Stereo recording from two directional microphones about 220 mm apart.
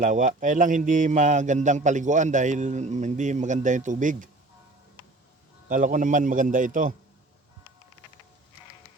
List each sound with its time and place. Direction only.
0.0 s speech: 35° right (ahead or behind)
5.6 s speech: 35° right (ahead or behind)